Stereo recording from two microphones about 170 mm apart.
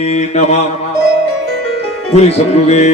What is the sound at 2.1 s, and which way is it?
Mantra, 40° left (ahead or behind).